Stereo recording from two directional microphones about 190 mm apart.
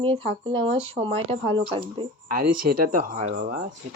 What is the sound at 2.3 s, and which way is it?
Speech, 50° right (ahead or behind).